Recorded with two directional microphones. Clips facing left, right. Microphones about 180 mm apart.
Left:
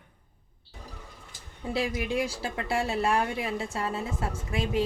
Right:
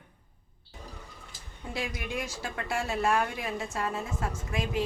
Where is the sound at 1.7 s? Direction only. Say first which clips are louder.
Left 6 dB; 30° left (ahead or behind).